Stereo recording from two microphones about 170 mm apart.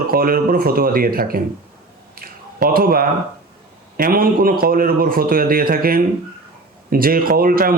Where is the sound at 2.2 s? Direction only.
60° right (ahead or behind).